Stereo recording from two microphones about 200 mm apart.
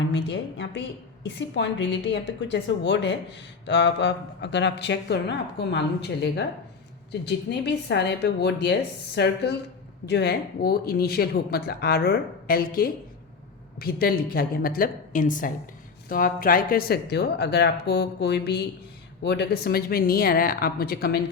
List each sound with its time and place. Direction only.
0.0 s speech: 60° left (ahead or behind)